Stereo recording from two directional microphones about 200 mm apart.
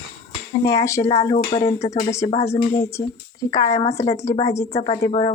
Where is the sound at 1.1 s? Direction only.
25° left (ahead or behind).